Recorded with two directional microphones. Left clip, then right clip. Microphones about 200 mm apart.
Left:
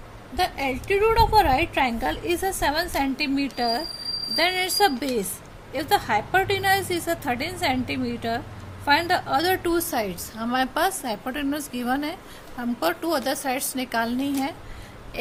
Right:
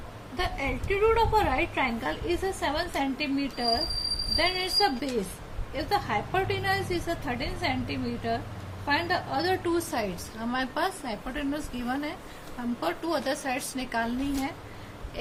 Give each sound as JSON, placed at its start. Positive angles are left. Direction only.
{"t": 0.3, "sound": "a woman's voice", "side_deg": 55}